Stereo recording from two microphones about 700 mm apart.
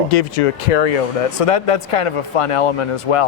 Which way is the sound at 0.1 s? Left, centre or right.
Left.